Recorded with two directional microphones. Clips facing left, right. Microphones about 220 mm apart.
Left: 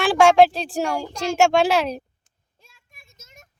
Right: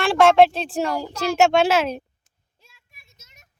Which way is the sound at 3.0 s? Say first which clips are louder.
Left 8 dB; 50° left (ahead or behind).